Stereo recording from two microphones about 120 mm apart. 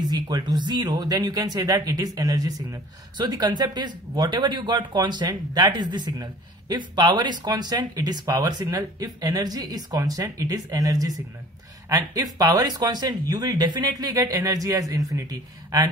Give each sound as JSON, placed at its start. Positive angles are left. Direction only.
{"t": 0.0, "sound": "speech", "side_deg": -35}